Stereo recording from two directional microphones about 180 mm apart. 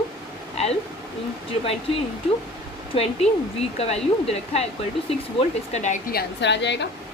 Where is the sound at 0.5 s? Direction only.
35° left (ahead or behind).